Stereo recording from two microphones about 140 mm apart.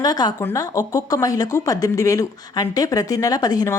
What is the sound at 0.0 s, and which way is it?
Speech, 30° left (ahead or behind).